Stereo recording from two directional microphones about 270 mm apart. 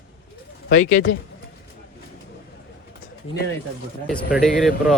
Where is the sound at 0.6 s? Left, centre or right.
Left.